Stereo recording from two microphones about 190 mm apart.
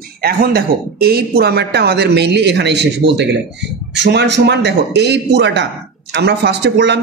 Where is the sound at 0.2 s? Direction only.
50° right (ahead or behind).